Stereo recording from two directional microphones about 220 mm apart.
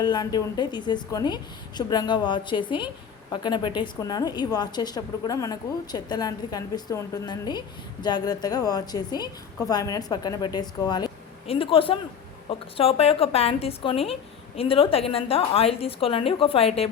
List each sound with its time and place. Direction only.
0.0 s a woman's voice: 20° left (ahead or behind)